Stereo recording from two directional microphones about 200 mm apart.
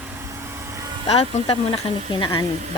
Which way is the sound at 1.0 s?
30° left (ahead or behind).